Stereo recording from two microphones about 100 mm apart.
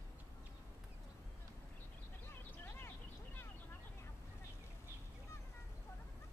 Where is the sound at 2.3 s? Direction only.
20° left (ahead or behind).